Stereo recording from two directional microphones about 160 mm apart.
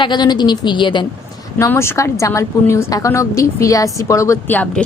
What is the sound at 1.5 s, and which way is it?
A woman's voice, 15° left (ahead or behind).